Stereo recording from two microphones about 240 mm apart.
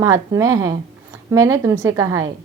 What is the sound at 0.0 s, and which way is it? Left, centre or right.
A woman's voice, centre.